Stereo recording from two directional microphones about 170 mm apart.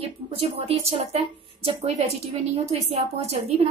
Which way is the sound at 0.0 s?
35° right (ahead or behind).